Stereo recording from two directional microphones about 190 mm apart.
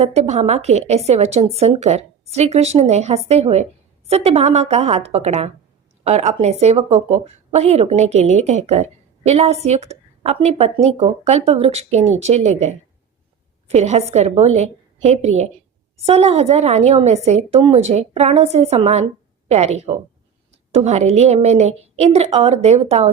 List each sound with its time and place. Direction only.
0.0 s speech: 35° right (ahead or behind)